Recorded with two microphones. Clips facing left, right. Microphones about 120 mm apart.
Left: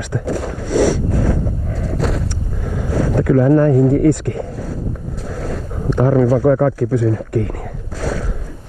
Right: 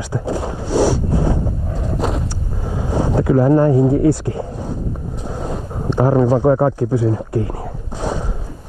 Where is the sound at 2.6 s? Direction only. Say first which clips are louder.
Even; 15° right (ahead or behind).